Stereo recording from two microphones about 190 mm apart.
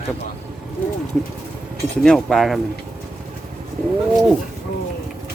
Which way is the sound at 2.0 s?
Centre (ahead or behind).